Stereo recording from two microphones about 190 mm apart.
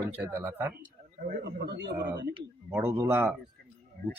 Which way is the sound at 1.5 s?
65° right (ahead or behind).